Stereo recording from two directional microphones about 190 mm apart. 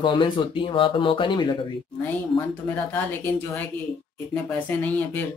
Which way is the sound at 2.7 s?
10° left (ahead or behind).